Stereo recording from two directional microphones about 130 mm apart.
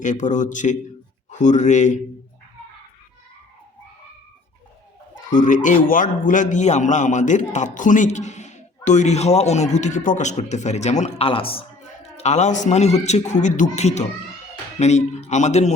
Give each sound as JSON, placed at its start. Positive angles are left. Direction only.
{"t": 0.0, "sound": "a man's voice", "side_deg": 70}
{"t": 5.3, "sound": "a man's voice", "side_deg": 80}
{"t": 11.3, "sound": "a man's voice", "side_deg": 45}
{"t": 12.1, "sound": "a man's voice", "side_deg": 60}